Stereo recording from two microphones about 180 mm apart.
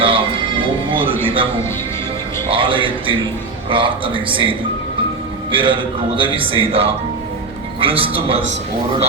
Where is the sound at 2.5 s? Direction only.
30° right (ahead or behind).